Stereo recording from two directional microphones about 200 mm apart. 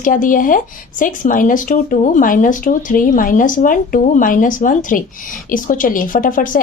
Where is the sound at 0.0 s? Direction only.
40° left (ahead or behind).